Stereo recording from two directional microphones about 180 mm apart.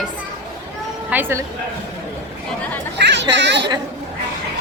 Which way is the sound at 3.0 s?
80° right.